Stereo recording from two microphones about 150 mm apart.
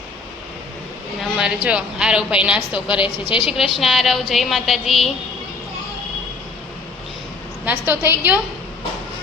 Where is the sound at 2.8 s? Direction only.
35° left (ahead or behind).